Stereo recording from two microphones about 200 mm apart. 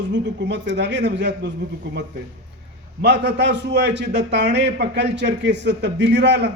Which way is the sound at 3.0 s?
60° right (ahead or behind).